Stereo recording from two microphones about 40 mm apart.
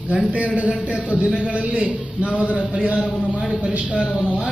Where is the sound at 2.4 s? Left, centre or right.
Left.